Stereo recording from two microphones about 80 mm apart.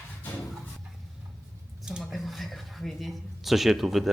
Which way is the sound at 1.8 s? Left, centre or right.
Centre.